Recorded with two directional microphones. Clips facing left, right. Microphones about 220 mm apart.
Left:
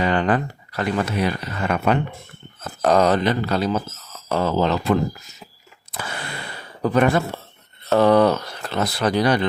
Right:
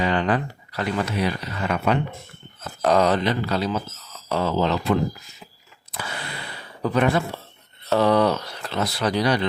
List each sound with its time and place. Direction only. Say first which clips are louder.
0.0 s speech: left 2 dB; 50° left (ahead or behind)
5.9 s a sound: left 2 dB; 45° left (ahead or behind)
6.8 s speech: left 3 dB; 45° left (ahead or behind)